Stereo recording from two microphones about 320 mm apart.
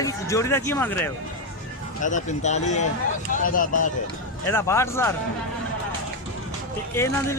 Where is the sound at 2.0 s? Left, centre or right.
Left.